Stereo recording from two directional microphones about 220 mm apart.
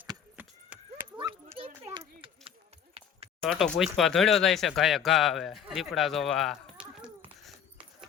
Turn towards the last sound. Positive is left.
turn(degrees=-5)  # may be behind; listen again after turning